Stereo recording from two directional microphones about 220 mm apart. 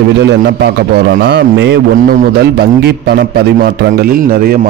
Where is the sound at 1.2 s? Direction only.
50° right (ahead or behind).